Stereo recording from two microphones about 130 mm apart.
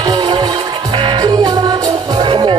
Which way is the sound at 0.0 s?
30° right (ahead or behind).